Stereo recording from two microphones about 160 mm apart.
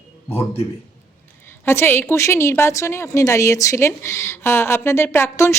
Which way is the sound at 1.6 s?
15° left (ahead or behind).